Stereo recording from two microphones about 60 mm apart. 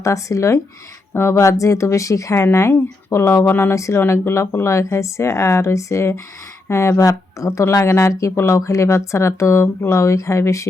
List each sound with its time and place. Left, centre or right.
0.0 s speech: left
1.1 s speech: left
3.2 s speech: left
3.8 s speech: left
4.0 s speech: left
7.6 s speech: left